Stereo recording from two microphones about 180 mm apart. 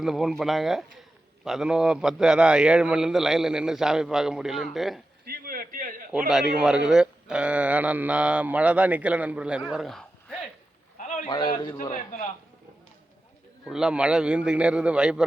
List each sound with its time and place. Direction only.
0.0 s a man's voice: centre (ahead or behind)
5.2 s a sound: 55° right (ahead or behind)
6.1 s a man's voice: 5° right (ahead or behind)
10.9 s a sound: 45° left (ahead or behind)
11.3 s a man's voice: 25° left (ahead or behind)
11.8 s a man's voice: 45° left (ahead or behind)
13.7 s a man's voice: 5° right (ahead or behind)